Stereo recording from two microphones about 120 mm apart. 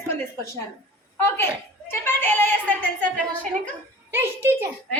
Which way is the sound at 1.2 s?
20° left (ahead or behind).